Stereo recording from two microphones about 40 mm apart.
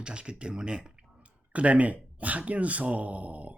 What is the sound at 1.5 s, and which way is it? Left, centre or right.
Speech, right.